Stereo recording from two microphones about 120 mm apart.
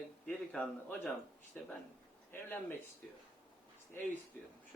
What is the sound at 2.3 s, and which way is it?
Speech, 15° left (ahead or behind).